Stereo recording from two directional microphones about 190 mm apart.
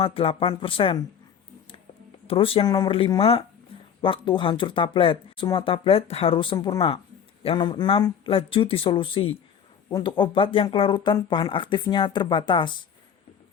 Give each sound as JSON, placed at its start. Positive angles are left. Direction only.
{"t": 0.0, "sound": "speech", "side_deg": 30}
{"t": 2.2, "sound": "speech", "side_deg": 30}